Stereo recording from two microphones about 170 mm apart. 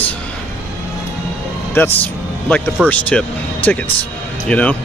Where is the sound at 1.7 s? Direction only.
10° left (ahead or behind).